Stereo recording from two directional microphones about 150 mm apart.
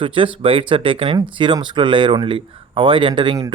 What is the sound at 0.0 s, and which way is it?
Speech, 35° right (ahead or behind).